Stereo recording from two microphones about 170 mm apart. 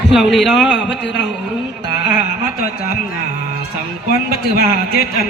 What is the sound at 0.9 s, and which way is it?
Speech, 90° left.